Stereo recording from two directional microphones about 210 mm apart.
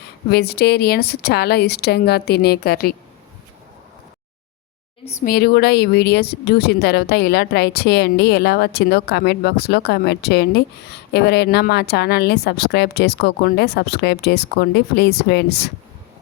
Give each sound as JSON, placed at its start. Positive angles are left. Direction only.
{"t": 0.3, "sound": "speech", "side_deg": 50}
{"t": 5.2, "sound": "speech", "side_deg": 45}